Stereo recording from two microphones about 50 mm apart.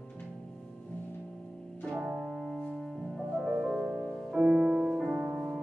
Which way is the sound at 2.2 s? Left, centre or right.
Centre.